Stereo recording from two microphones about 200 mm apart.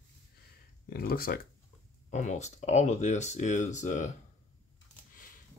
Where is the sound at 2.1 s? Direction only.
35° left (ahead or behind).